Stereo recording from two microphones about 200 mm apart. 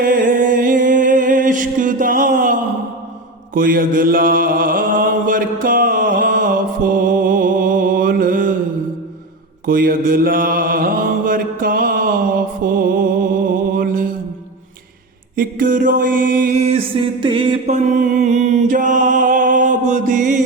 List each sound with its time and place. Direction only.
0.0 s music: 45° right (ahead or behind)
3.5 s mantra: 45° right (ahead or behind)
9.6 s mantra: 45° right (ahead or behind)
15.4 s mantra: 45° right (ahead or behind); by 17.7 s 25° right (ahead or behind)
18.0 s mantra: 35° right (ahead or behind)